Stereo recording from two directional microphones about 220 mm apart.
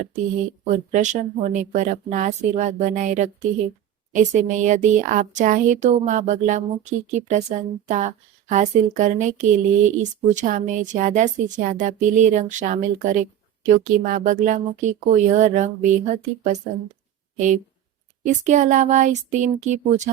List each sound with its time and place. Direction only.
0.7 s speech: 35° right (ahead or behind)